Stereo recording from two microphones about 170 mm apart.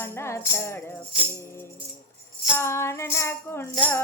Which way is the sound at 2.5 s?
15° left (ahead or behind).